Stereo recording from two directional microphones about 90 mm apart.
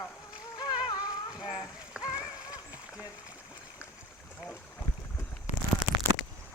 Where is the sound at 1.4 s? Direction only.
10° right (ahead or behind).